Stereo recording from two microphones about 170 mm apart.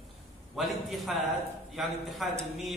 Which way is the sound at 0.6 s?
Centre (ahead or behind).